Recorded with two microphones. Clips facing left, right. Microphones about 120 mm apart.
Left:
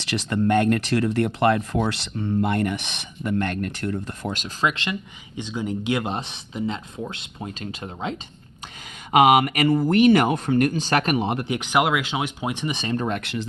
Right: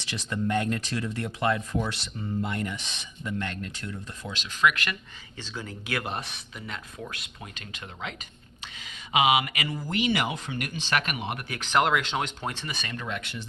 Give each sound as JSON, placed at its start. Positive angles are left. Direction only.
{"t": 0.0, "sound": "speech", "side_deg": 80}
{"t": 4.6, "sound": "speech", "side_deg": 25}
{"t": 9.1, "sound": "speech", "side_deg": 50}
{"t": 13.1, "sound": "speech", "side_deg": 50}